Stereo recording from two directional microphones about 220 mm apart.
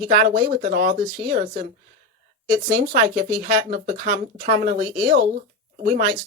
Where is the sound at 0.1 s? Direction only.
40° right (ahead or behind).